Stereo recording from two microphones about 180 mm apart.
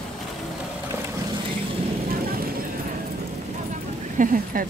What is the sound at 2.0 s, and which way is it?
Vehicle, 55° right (ahead or behind).